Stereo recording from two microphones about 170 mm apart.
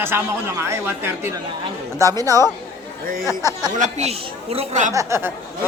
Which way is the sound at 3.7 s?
45° right (ahead or behind).